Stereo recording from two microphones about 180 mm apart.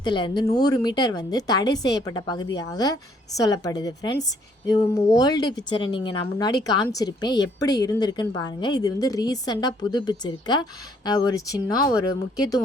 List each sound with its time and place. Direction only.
0.0 s a woman's voice: 25° left (ahead or behind)